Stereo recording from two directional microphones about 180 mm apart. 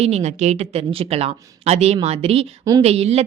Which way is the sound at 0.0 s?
35° right (ahead or behind).